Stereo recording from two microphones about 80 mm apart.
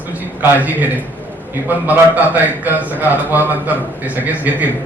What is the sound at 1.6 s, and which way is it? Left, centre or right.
A man's voice, right.